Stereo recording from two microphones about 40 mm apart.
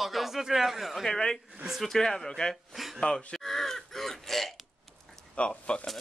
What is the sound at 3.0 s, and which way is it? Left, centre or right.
Speech, left.